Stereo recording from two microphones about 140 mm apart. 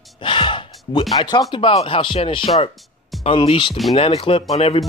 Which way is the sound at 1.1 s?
30° left (ahead or behind).